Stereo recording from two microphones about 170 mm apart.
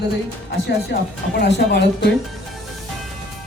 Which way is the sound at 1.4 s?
80° left.